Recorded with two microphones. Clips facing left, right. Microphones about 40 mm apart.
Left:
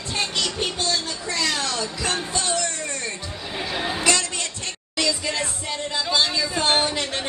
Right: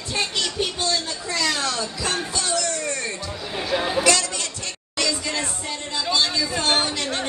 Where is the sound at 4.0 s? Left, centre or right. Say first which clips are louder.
Right 1 dB; left.